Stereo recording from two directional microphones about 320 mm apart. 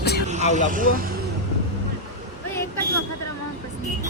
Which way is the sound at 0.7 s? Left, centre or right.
Right.